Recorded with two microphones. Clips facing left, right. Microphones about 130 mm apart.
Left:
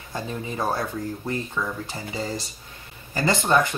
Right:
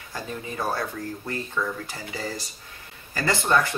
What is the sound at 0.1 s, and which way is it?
Speech, 25° left (ahead or behind).